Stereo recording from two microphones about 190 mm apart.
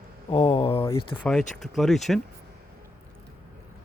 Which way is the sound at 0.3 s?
30° left (ahead or behind).